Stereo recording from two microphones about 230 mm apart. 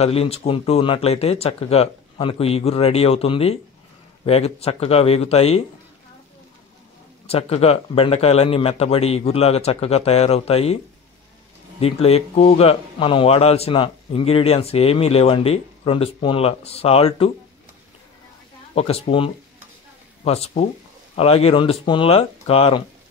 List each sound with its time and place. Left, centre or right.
0.0 s a man's voice: left
7.2 s a man's voice: left
11.8 s a man's voice: left
18.8 s a man's voice: left